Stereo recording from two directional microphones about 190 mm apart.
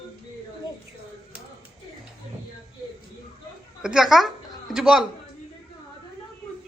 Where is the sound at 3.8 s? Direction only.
5° right (ahead or behind).